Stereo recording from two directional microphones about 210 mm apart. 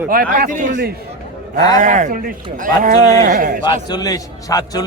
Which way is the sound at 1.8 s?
35° right (ahead or behind).